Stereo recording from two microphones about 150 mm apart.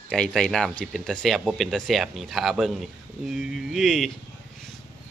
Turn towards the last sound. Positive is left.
turn(degrees=0)  # may be behind; listen again after turning